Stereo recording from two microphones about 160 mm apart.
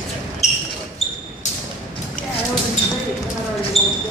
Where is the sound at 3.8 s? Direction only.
40° left (ahead or behind).